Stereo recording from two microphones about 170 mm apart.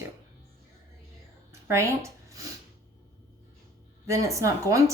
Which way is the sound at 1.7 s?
15° right (ahead or behind).